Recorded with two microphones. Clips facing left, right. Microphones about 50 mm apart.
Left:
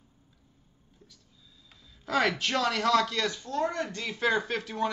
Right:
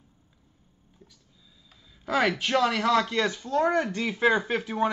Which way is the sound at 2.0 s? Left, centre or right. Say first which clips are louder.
Right 2 dB; centre.